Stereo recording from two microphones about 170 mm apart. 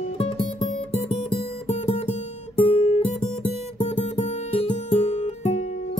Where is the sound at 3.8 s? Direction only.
40° left (ahead or behind).